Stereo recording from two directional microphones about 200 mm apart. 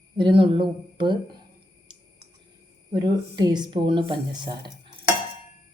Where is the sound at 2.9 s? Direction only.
20° right (ahead or behind).